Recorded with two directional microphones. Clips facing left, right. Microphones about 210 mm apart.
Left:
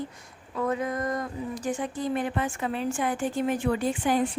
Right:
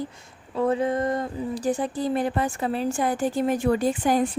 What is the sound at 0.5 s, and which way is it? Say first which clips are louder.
Speech: right 5 dB; 30° right (ahead or behind).